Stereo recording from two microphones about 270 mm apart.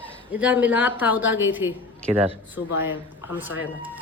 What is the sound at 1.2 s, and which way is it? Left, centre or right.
Speech, left.